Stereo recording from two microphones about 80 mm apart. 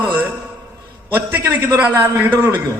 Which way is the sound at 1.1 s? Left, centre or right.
Right.